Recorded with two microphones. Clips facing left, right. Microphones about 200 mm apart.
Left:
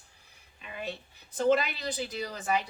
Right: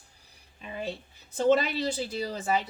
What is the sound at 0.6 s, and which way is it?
Speech, 30° right (ahead or behind).